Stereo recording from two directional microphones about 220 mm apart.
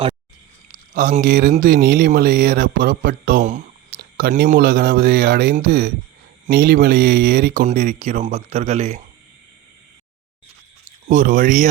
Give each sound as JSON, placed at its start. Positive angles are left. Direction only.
{"t": 0.9, "sound": "speech", "side_deg": -35}
{"t": 11.1, "sound": "speech", "side_deg": -35}